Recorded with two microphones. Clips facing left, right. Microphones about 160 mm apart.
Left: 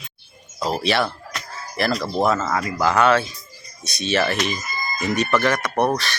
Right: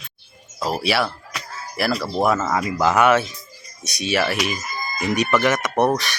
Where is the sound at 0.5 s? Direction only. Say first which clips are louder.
Even; 5° right (ahead or behind).